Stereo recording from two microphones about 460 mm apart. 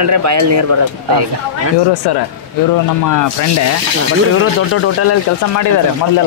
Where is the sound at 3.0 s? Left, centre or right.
Left.